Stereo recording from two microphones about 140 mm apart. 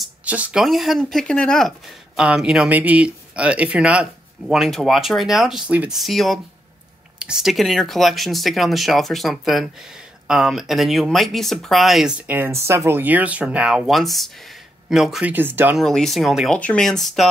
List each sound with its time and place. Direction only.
0.0 s speech: 10° right (ahead or behind); by 1.7 s 5° left (ahead or behind)
2.1 s speech: 5° right (ahead or behind)
15.3 s speech: 15° right (ahead or behind)
15.8 s speech: 5° left (ahead or behind)